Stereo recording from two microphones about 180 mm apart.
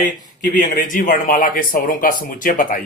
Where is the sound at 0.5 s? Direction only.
45° left (ahead or behind).